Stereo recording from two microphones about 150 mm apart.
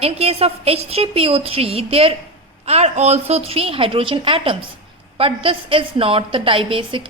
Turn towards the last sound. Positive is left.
turn(degrees=-35)  # may be behind; listen again after turning